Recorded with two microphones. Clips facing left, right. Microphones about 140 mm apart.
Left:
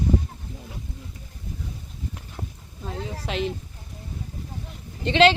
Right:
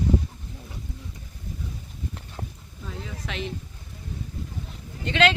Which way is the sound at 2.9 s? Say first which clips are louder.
Left 5 dB; 35° left (ahead or behind).